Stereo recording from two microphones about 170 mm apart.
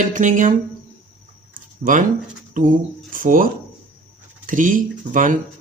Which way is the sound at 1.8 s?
50° right (ahead or behind).